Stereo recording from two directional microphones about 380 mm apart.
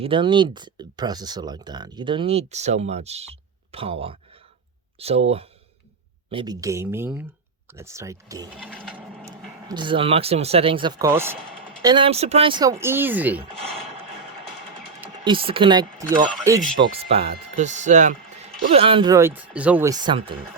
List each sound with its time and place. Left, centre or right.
0.0 s speech: centre
6.3 s speech: centre
8.5 s a sound: centre
9.6 s speech: centre
15.2 s speech: centre
16.8 s speech: centre